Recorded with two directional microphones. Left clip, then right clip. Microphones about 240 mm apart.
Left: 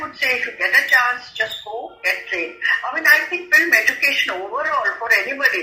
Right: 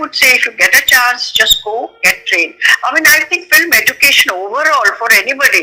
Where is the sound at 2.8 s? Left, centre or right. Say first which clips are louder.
Right 6 dB; right.